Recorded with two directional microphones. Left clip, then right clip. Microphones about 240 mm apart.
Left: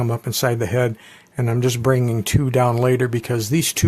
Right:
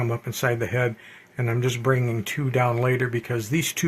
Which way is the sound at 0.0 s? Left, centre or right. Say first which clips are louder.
Left 4 dB; left.